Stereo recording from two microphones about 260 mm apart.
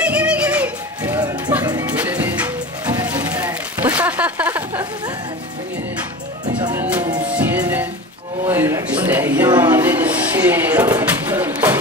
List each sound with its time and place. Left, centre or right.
0.0 s music: centre
6.6 s music: centre
8.5 s a sound: centre